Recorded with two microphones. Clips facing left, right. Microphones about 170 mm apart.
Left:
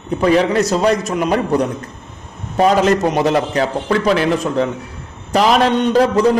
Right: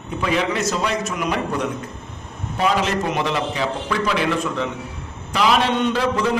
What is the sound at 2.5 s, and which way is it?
A man's voice, 45° left (ahead or behind).